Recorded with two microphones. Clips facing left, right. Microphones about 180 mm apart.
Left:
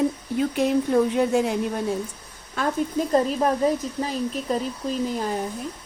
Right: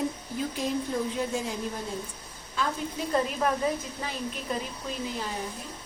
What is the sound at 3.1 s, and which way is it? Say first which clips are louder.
A woman's voice: left 4 dB; 35° left (ahead or behind).